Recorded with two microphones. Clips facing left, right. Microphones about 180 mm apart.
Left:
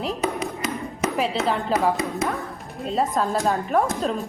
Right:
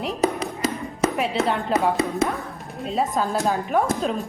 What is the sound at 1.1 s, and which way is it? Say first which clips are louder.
Speech: even; centre (ahead or behind).